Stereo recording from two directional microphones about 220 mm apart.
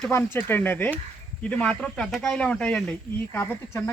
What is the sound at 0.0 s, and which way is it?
Speech, 10° left (ahead or behind).